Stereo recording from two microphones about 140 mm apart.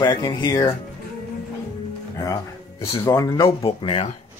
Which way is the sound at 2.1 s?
25° left (ahead or behind).